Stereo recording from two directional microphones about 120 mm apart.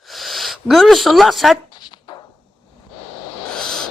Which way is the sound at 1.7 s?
35° left (ahead or behind).